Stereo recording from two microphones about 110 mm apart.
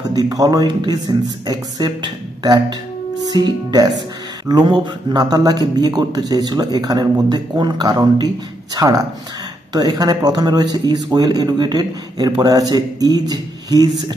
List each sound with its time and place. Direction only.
0.1 s speech: 35° right (ahead or behind); by 5.2 s 50° right (ahead or behind)
5.2 s speech: 35° right (ahead or behind)